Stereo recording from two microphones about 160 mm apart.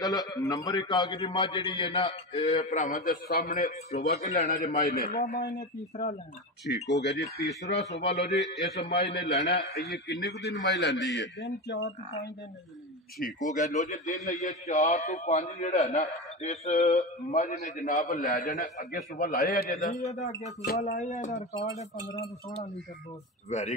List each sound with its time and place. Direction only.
0.0 s a man's voice: 25° left (ahead or behind); by 5.4 s 55° left (ahead or behind)
6.7 s a man's voice: 90° left
13.2 s a man's voice: 55° left (ahead or behind); by 19.4 s 75° left (ahead or behind)
19.4 s a man's voice: 60° left (ahead or behind)
20.7 s a man's voice: 45° left (ahead or behind)
22.0 s a man's voice: 20° left (ahead or behind)
23.5 s a man's voice: 45° left (ahead or behind)